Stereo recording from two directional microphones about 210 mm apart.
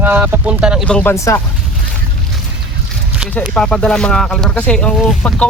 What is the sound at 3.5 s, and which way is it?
Speech, 5° left (ahead or behind).